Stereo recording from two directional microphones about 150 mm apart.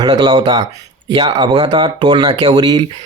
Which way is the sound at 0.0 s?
30° right (ahead or behind).